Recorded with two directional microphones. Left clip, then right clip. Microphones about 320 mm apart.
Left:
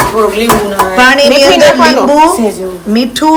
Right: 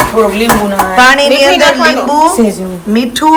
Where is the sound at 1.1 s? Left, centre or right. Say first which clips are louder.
Left 1 dB; centre.